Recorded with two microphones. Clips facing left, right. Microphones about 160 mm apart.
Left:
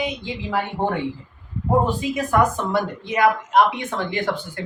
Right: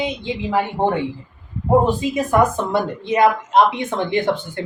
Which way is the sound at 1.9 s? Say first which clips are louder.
Right 3 dB; 20° right (ahead or behind).